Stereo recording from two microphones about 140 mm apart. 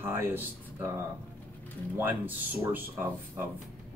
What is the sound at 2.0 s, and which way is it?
Speech, 15° right (ahead or behind).